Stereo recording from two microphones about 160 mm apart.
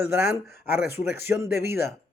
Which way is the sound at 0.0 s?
15° right (ahead or behind).